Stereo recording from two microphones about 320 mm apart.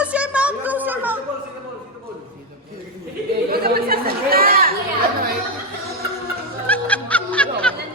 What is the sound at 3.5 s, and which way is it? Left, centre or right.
Chatter, right.